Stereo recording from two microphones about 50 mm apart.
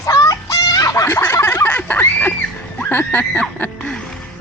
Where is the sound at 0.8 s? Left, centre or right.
Left.